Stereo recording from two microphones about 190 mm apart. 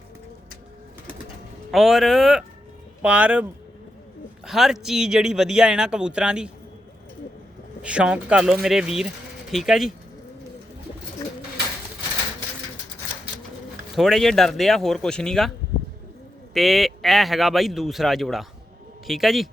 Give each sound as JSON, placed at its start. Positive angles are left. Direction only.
{"t": 1.7, "sound": "a man's voice", "side_deg": 0}
{"t": 4.4, "sound": "a man's voice", "side_deg": 0}
{"t": 7.8, "sound": "a man's voice", "side_deg": -5}
{"t": 13.9, "sound": "a man's voice", "side_deg": 0}
{"t": 16.6, "sound": "a man's voice", "side_deg": 0}